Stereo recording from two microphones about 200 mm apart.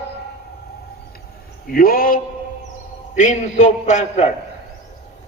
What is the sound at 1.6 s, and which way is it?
A man's voice, 45° left (ahead or behind).